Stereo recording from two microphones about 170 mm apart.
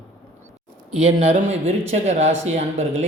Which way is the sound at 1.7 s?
40° right (ahead or behind).